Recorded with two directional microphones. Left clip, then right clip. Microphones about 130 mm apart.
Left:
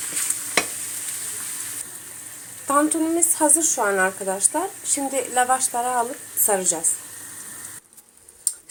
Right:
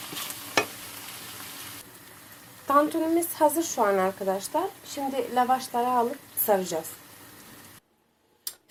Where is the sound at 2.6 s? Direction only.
Centre (ahead or behind).